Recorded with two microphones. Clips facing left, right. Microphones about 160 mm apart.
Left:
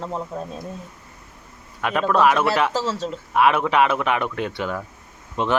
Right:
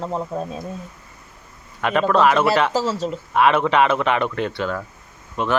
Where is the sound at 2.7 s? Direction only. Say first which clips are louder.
Right 3 dB; 10° right (ahead or behind).